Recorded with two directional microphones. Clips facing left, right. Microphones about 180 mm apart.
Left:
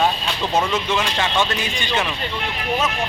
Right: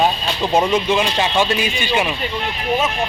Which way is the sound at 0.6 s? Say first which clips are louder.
Right 5 dB; 15° right (ahead or behind).